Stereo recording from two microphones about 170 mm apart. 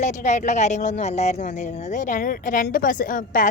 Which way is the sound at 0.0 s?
45° left (ahead or behind).